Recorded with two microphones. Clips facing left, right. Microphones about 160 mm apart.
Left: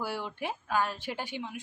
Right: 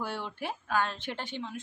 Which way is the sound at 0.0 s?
10° left (ahead or behind).